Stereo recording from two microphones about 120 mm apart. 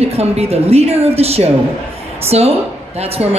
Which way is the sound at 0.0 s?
60° right (ahead or behind).